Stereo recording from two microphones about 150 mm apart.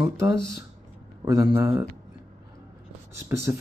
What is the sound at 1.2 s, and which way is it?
Speech, 25° right (ahead or behind).